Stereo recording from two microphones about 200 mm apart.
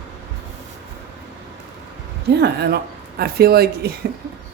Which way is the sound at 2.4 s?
55° right (ahead or behind).